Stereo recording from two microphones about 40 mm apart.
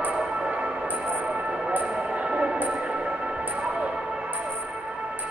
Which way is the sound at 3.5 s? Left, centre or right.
Right.